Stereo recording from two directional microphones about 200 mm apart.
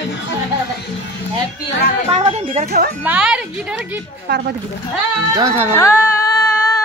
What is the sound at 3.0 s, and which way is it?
Speech, 5° right (ahead or behind).